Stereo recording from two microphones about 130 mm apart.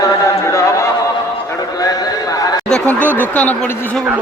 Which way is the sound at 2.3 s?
30° left (ahead or behind).